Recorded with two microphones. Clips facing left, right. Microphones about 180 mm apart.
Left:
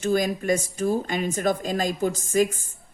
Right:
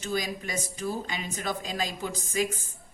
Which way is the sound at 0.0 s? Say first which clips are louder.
Left 8 dB; 50° left (ahead or behind).